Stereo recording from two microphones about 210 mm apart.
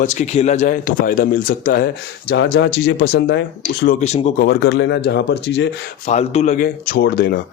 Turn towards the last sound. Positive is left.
turn(degrees=50)  # may be behind; listen again after turning